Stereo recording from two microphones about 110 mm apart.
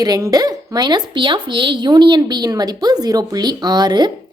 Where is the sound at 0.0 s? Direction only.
35° right (ahead or behind).